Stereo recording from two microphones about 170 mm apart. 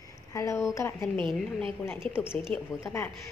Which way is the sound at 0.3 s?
20° left (ahead or behind).